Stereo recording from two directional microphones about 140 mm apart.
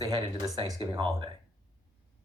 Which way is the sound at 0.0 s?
30° right (ahead or behind).